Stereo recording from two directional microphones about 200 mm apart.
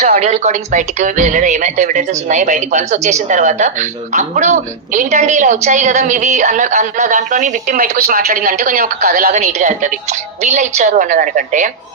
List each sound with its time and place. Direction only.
0.0 s speech: 35° right (ahead or behind)